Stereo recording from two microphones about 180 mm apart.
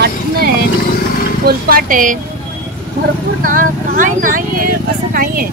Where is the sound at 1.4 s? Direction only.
55° right (ahead or behind).